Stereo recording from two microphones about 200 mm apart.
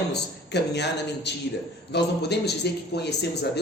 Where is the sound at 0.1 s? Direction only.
55° left (ahead or behind).